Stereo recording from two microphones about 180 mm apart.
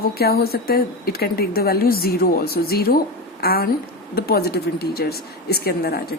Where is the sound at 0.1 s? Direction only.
60° left (ahead or behind).